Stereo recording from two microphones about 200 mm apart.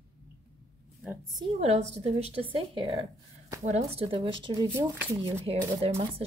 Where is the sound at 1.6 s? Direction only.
30° right (ahead or behind).